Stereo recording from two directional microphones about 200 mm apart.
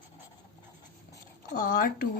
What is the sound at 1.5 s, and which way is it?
Speech, 45° left (ahead or behind).